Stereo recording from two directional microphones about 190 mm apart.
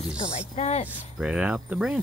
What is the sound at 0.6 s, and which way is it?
Speech, 35° left (ahead or behind).